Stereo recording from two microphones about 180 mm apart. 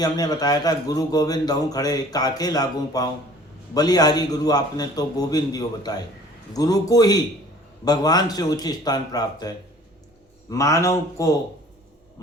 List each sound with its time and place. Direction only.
0.0 s a man's voice: 20° left (ahead or behind)